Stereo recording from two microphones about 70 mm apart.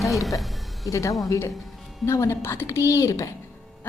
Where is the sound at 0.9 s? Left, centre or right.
Left.